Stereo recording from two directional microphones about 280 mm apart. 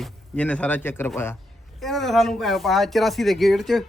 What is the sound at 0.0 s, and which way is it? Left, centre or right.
Speech, centre.